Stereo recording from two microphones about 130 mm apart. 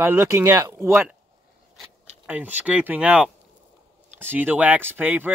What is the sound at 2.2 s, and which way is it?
Speech, 10° right (ahead or behind).